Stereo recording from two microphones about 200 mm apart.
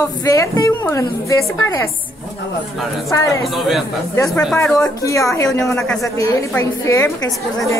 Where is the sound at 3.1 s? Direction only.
15° left (ahead or behind).